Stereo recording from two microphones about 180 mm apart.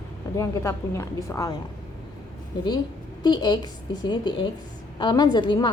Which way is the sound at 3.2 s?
25° left (ahead or behind).